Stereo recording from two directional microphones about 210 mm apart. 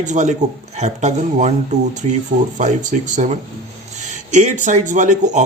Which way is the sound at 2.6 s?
35° right (ahead or behind).